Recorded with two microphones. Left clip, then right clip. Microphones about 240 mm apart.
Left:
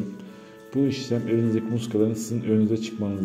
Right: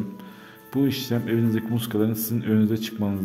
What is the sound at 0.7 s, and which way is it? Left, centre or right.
A man's voice, right.